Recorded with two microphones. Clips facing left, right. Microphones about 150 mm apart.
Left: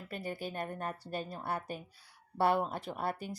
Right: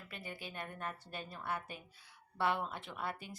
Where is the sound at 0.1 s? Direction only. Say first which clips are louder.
Left 9 dB; 40° left (ahead or behind).